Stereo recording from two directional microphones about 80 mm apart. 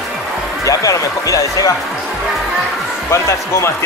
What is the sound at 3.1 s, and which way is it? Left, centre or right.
Speech, left.